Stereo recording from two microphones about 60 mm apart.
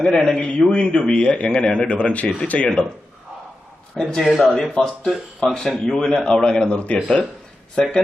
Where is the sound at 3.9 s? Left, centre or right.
Centre.